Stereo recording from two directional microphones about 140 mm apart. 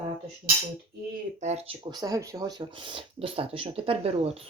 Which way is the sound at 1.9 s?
25° right (ahead or behind).